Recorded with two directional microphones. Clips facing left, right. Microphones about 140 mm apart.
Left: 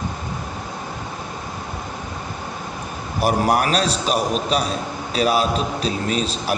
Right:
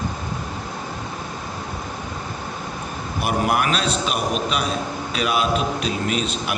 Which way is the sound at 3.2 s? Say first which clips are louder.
Left 3 dB; 40° left (ahead or behind).